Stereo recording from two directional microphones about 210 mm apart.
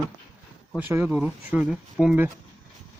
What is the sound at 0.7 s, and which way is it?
Speech, 10° right (ahead or behind).